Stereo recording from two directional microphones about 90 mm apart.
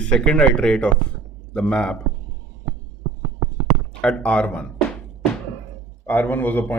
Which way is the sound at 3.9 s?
10° left (ahead or behind).